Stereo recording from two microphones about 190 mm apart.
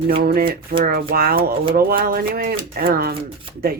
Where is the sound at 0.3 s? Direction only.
50° right (ahead or behind).